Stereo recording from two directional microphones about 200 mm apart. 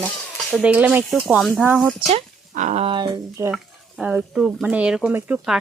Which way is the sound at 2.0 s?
30° right (ahead or behind).